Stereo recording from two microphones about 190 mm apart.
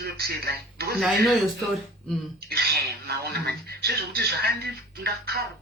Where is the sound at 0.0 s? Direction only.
55° right (ahead or behind).